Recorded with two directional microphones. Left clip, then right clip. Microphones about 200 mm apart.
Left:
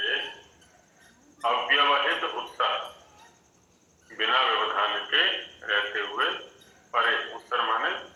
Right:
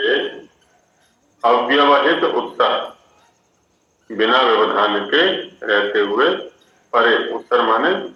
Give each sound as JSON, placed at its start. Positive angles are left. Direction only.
{"t": 1.4, "sound": "a man's voice", "side_deg": -70}
{"t": 4.1, "sound": "a man's voice", "side_deg": -70}